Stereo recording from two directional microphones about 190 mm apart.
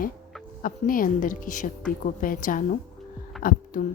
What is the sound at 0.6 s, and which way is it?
A woman's voice, 45° left (ahead or behind).